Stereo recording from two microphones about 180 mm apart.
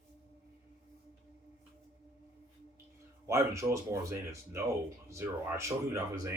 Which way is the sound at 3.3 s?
15° right (ahead or behind).